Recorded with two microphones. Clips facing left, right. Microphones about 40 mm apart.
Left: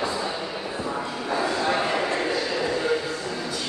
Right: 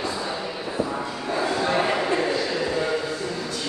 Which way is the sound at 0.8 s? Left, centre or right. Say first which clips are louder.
Right 3 dB; centre.